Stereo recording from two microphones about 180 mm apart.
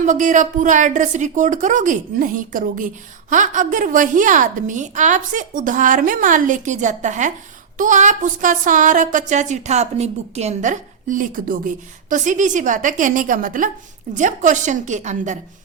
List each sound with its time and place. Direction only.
0.0 s speech: 45° right (ahead or behind)